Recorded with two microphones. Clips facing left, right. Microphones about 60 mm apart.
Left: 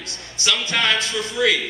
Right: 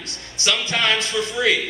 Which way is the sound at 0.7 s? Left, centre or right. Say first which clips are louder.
Even; right.